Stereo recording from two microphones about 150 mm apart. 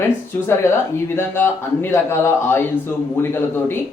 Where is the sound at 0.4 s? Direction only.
15° left (ahead or behind).